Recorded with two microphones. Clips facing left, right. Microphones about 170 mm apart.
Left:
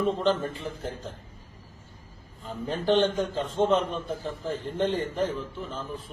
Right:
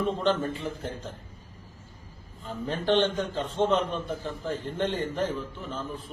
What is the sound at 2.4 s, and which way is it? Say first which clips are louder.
A man's voice: left 1 dB; centre (ahead or behind).